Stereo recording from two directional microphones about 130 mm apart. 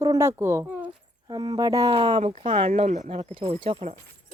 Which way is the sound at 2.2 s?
55° right (ahead or behind).